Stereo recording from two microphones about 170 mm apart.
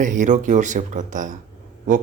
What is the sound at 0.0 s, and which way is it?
Speech, 50° right (ahead or behind).